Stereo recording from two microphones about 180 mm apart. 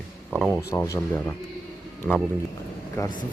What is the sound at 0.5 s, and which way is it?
Speech, 15° left (ahead or behind).